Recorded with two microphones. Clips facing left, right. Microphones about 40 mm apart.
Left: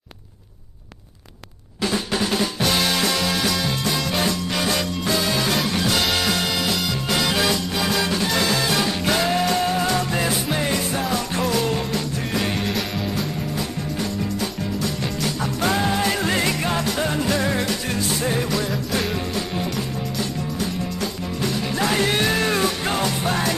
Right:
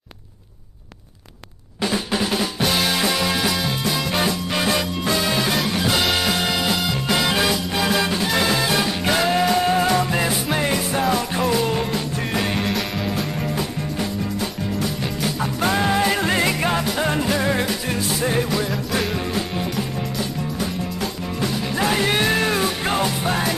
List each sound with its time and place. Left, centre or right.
1.8 s drum: centre
5.1 s music: centre
21.0 s music: centre